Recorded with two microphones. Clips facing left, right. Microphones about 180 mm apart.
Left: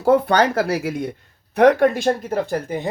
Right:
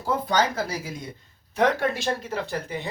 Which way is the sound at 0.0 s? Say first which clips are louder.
Left 8 dB; 65° left (ahead or behind).